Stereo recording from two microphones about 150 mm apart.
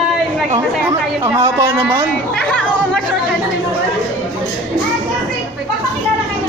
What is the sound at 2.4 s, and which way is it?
Chatter, 5° left (ahead or behind).